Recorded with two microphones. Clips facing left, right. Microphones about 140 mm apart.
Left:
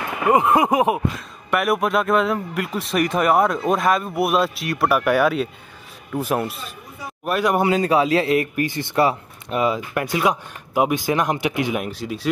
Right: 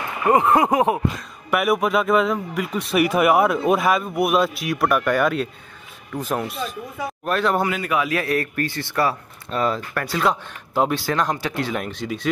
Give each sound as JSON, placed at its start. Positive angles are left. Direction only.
{"t": 0.3, "sound": "speech", "side_deg": 15}
{"t": 1.5, "sound": "speech", "side_deg": 0}
{"t": 7.6, "sound": "speech", "side_deg": 30}